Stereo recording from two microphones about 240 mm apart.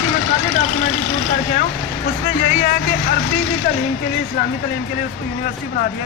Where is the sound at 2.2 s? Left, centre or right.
Left.